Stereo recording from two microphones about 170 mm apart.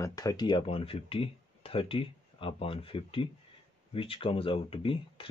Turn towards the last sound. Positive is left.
turn(degrees=30)  # may be behind; listen again after turning